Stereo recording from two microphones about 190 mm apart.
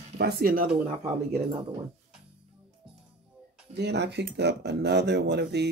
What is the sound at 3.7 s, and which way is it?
Speech, 60° right (ahead or behind).